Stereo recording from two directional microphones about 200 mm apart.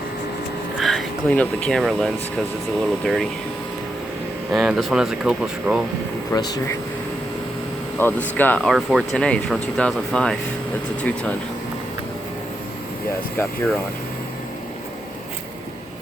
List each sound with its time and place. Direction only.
0.8 s speech: centre (ahead or behind)
4.5 s speech: centre (ahead or behind)
6.3 s speech: 20° left (ahead or behind)
7.9 s speech: 10° left (ahead or behind)